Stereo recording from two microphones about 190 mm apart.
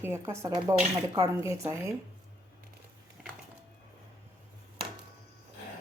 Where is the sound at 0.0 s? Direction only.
15° right (ahead or behind).